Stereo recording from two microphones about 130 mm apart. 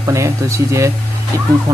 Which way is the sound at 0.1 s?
20° right (ahead or behind).